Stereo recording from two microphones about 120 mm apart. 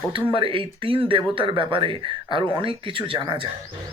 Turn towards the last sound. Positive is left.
turn(degrees=-45)  # may be behind; listen again after turning